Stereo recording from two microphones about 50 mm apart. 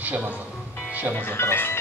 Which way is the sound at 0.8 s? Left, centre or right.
Right.